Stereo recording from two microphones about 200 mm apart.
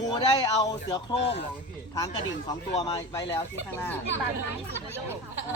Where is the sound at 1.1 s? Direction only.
60° left (ahead or behind).